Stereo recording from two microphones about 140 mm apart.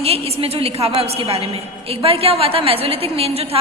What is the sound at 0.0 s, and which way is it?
A woman's voice, 45° right (ahead or behind).